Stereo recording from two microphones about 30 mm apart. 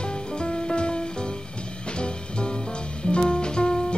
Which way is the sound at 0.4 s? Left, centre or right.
Left.